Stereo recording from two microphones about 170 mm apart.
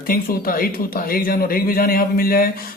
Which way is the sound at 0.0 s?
60° left (ahead or behind).